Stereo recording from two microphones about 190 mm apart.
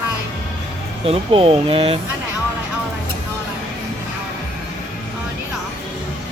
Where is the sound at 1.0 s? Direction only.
30° right (ahead or behind).